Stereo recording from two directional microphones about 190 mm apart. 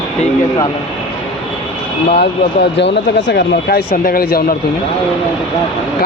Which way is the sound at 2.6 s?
65° left (ahead or behind).